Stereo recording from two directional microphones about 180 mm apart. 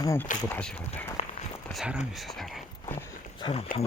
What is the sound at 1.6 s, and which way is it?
Speech, centre (ahead or behind).